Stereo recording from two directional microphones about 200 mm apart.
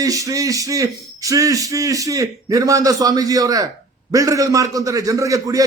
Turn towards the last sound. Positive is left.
turn(degrees=-15)  # may be behind; listen again after turning